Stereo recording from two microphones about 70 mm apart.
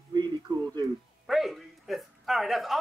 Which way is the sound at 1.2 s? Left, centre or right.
Centre.